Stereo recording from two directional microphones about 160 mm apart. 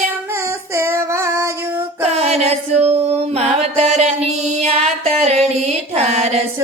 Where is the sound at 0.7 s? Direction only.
15° right (ahead or behind).